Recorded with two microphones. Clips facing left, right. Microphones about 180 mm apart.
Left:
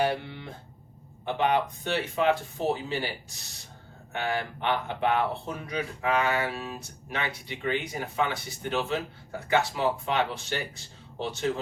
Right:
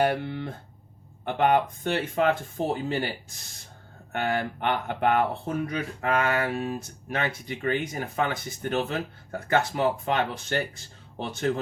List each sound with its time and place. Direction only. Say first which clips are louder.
0.0 s speech: right 3 dB; 55° right (ahead or behind)